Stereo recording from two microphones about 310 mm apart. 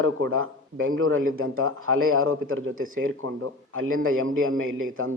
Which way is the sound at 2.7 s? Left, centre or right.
Right.